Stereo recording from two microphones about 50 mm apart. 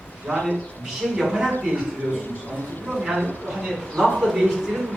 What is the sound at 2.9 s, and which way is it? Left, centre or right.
Speech, centre.